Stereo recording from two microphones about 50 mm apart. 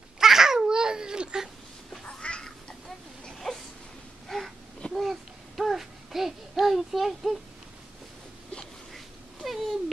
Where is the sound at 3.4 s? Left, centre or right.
Centre.